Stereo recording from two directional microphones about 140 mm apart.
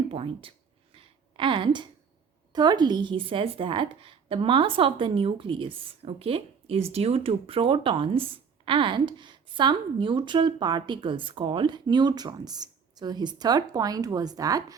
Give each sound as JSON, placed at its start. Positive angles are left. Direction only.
{"t": 0.1, "sound": "speech", "side_deg": -40}
{"t": 0.9, "sound": "a sound", "side_deg": -35}
{"t": 2.5, "sound": "speech", "side_deg": -30}